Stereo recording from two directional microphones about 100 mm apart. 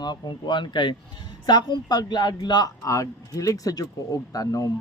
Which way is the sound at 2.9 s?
35° left (ahead or behind).